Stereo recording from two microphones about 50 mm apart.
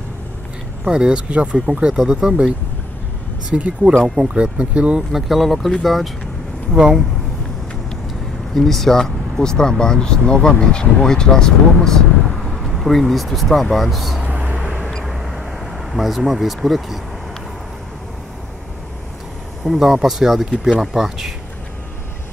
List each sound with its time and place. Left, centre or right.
0.8 s speech: centre
3.5 s speech: right
4.1 s speech: centre
4.4 s speech: right
5.1 s speech: centre
6.7 s speech: centre
8.5 s speech: centre
14.2 s vehicle: right
15.0 s vehicle: centre
15.9 s speech: centre
19.6 s speech: centre